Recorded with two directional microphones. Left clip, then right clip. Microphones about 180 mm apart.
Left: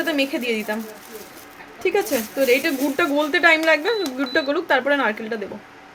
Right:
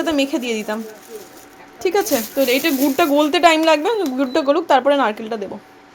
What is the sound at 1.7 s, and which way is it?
A woman's voice, 30° right (ahead or behind).